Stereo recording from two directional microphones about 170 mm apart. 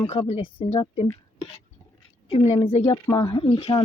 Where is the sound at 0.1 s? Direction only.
35° left (ahead or behind).